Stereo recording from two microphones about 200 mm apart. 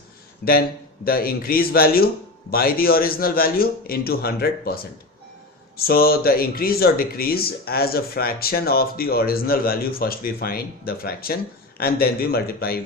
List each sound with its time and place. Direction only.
0.4 s speech: 55° left (ahead or behind)